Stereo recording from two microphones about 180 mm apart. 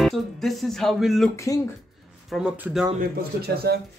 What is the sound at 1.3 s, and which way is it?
Speech, 15° left (ahead or behind).